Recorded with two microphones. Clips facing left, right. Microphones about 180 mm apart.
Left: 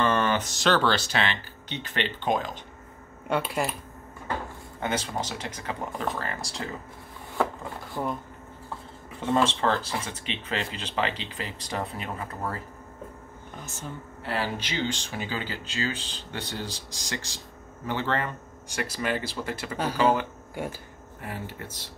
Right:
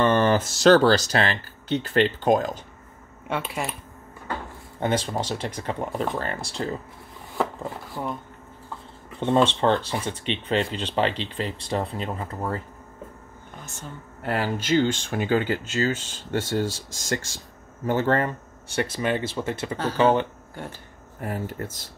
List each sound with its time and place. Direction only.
0.0 s speech: 30° right (ahead or behind)
3.3 s speech: centre (ahead or behind)
4.7 s speech: 30° right (ahead or behind)
7.9 s speech: centre (ahead or behind)
9.2 s speech: 30° right (ahead or behind)
14.2 s speech: 45° right (ahead or behind)
18.9 s speech: 25° right (ahead or behind)
19.8 s speech: 10° left (ahead or behind)
21.2 s speech: 45° right (ahead or behind)